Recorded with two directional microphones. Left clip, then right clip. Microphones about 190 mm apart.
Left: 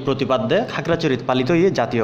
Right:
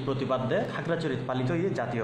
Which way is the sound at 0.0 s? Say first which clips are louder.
Left 9 dB; 35° left (ahead or behind).